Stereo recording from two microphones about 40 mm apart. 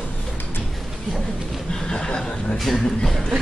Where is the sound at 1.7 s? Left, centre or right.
Left.